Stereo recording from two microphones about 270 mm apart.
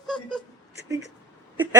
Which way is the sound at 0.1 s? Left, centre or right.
Centre.